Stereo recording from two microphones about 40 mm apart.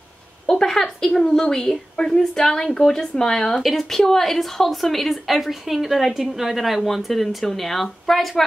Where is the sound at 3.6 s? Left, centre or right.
Centre.